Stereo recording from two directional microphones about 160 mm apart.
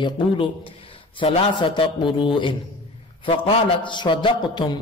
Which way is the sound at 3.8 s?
30° left (ahead or behind).